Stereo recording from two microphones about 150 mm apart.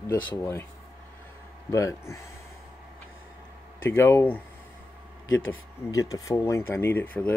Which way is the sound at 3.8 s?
15° left (ahead or behind).